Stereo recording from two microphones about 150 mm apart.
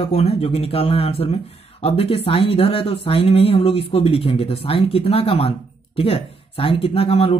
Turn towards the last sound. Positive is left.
turn(degrees=40)  # may be behind; listen again after turning